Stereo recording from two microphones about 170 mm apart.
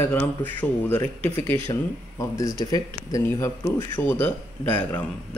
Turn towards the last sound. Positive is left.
turn(degrees=10)  # may be behind; listen again after turning